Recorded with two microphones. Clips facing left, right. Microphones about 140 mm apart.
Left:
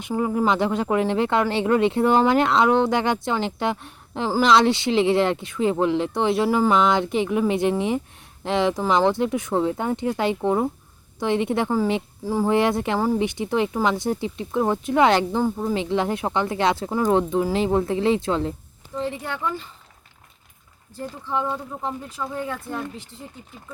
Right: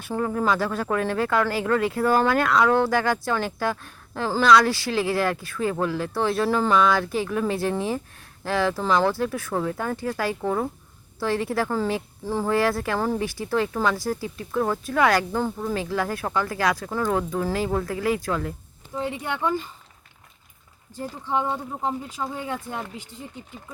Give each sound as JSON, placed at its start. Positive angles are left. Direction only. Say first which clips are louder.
{"t": 0.1, "sound": "speech", "louder": "left 2 dB", "side_deg": 15}
{"t": 18.9, "sound": "speech", "louder": "even", "side_deg": -10}
{"t": 21.3, "sound": "speech", "louder": "even", "side_deg": -20}